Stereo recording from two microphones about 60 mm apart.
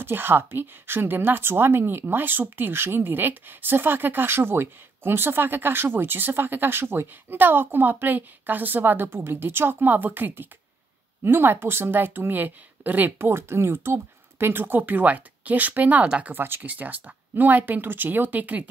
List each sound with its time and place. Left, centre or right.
0.0 s a woman's voice: right
13.3 s a woman's voice: right